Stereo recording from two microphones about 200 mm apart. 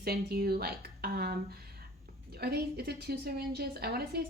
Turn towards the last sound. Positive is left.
turn(degrees=-50)  # may be behind; listen again after turning